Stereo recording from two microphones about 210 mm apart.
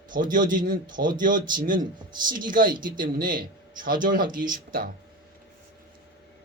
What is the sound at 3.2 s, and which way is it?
Speech, 40° right (ahead or behind).